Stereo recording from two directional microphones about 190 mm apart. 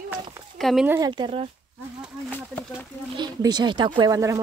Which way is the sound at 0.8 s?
10° right (ahead or behind).